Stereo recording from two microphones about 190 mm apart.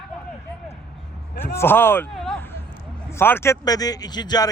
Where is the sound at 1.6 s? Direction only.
10° left (ahead or behind).